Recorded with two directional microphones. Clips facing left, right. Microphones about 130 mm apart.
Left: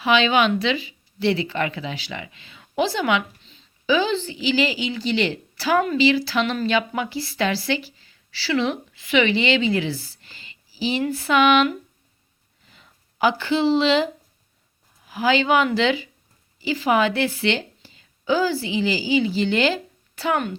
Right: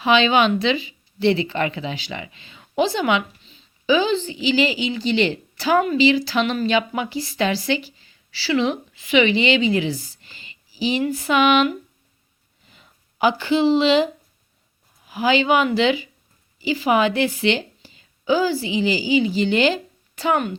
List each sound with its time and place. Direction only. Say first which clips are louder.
0.0 s a woman's voice: right 2 dB; 25° right (ahead or behind)
12.7 s a woman's voice: even; 15° right (ahead or behind)